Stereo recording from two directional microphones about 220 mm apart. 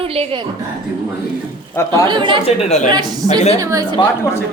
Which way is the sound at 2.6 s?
30° left (ahead or behind).